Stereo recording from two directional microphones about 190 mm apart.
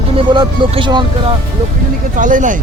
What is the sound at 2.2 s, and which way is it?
Speech, 45° right (ahead or behind).